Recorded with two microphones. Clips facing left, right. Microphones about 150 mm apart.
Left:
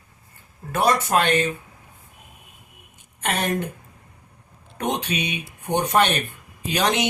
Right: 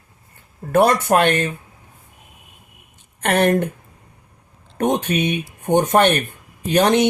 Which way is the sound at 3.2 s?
60° right (ahead or behind).